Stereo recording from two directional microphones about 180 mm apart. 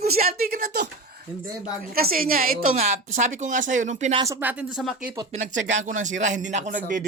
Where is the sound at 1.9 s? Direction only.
55° right (ahead or behind).